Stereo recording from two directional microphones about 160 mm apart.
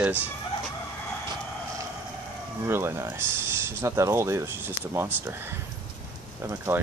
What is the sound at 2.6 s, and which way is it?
Speech, 15° right (ahead or behind).